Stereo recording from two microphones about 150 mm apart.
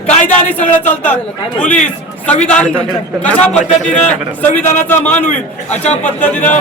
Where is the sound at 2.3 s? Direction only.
10° left (ahead or behind).